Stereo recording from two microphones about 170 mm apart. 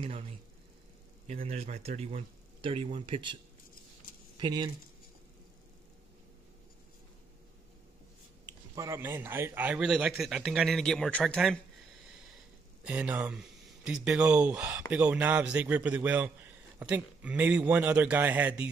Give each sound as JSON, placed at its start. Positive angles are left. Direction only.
{"t": 0.0, "sound": "speech", "side_deg": -30}
{"t": 4.4, "sound": "speech", "side_deg": -25}
{"t": 8.5, "sound": "a man's voice", "side_deg": -20}
{"t": 12.8, "sound": "a man's voice", "side_deg": -5}